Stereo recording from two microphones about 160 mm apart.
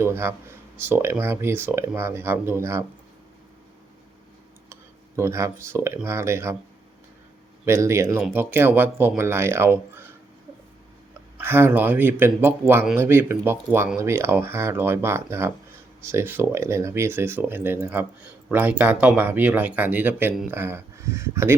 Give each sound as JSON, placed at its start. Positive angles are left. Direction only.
{"t": 0.0, "sound": "speech", "side_deg": -15}
{"t": 4.7, "sound": "speech", "side_deg": -15}
{"t": 7.6, "sound": "speech", "side_deg": -15}
{"t": 11.4, "sound": "speech", "side_deg": -15}